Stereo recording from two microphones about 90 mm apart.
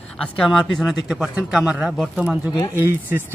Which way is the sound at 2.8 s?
20° right (ahead or behind).